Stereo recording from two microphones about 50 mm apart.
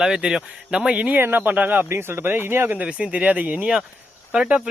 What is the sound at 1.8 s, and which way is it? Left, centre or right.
Speech, right.